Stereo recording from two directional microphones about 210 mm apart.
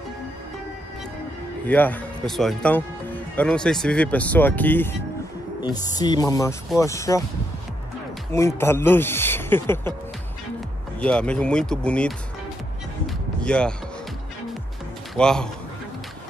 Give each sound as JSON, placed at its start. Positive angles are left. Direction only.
{"t": 1.7, "sound": "speech", "side_deg": 10}
{"t": 8.3, "sound": "speech", "side_deg": 15}
{"t": 11.0, "sound": "speech", "side_deg": 5}
{"t": 13.0, "sound": "music", "side_deg": 5}
{"t": 15.1, "sound": "speech", "side_deg": 5}